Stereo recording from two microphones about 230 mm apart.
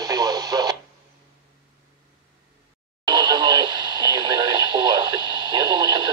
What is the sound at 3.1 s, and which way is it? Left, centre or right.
Radio, centre.